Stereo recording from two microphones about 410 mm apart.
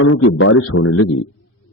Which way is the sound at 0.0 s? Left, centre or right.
Left.